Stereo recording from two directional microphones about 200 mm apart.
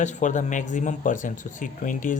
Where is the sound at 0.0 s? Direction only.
35° left (ahead or behind).